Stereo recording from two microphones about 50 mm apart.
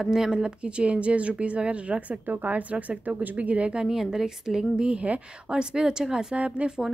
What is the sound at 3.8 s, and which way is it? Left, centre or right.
Speech, centre.